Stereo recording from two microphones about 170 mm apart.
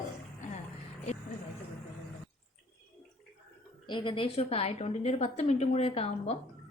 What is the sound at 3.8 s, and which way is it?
A woman's voice, 30° left (ahead or behind).